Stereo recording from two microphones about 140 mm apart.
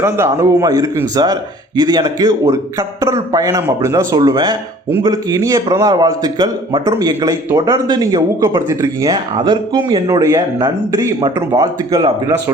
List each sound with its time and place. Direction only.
0.0 s a man's voice: 20° right (ahead or behind)
10.1 s a man's voice: 20° right (ahead or behind)